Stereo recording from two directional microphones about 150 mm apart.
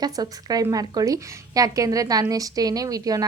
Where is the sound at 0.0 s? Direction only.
25° right (ahead or behind).